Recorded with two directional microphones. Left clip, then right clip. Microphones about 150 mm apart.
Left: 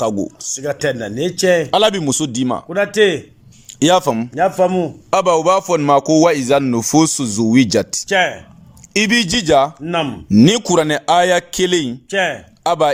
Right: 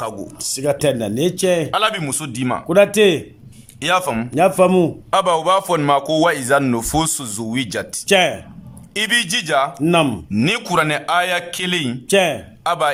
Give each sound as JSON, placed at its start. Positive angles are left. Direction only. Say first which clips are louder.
{"t": 0.5, "sound": "speech", "louder": "right 2 dB", "side_deg": -15}
{"t": 1.7, "sound": "a man's voice", "louder": "left 4 dB", "side_deg": 40}
{"t": 2.6, "sound": "speech", "louder": "right 3 dB", "side_deg": -15}
{"t": 3.8, "sound": "a man's voice", "louder": "left 5 dB", "side_deg": 35}
{"t": 4.4, "sound": "speech", "louder": "right 2 dB", "side_deg": -20}
{"t": 5.1, "sound": "a man's voice", "louder": "left 3 dB", "side_deg": 25}
{"t": 8.0, "sound": "speech", "louder": "right 4 dB", "side_deg": -20}
{"t": 8.9, "sound": "a man's voice", "louder": "left 2 dB", "side_deg": 25}
{"t": 9.8, "sound": "speech", "louder": "right 4 dB", "side_deg": -20}
{"t": 10.4, "sound": "a man's voice", "louder": "left 3 dB", "side_deg": 35}
{"t": 12.1, "sound": "speech", "louder": "right 2 dB", "side_deg": -20}
{"t": 12.6, "sound": "a man's voice", "louder": "left 3 dB", "side_deg": 35}